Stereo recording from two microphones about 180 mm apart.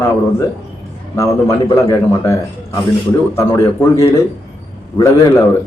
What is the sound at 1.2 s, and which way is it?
A man's voice, 15° left (ahead or behind).